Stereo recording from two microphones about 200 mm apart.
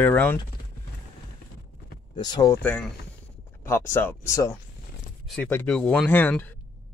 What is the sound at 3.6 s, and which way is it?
Speech, 15° left (ahead or behind).